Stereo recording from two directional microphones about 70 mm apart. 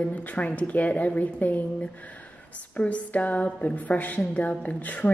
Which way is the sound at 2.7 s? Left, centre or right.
Centre.